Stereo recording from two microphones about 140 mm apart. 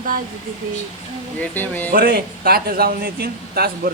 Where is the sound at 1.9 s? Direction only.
90° right.